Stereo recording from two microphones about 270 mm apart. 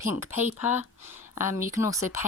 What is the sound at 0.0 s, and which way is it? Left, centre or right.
Speech, centre.